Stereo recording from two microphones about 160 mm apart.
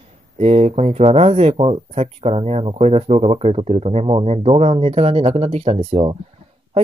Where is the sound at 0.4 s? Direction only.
40° right (ahead or behind).